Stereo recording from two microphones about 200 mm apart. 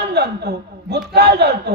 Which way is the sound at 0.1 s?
55° right (ahead or behind).